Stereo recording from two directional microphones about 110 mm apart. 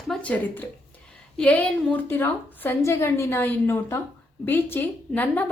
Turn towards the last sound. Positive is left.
turn(degrees=15)  # may be behind; listen again after turning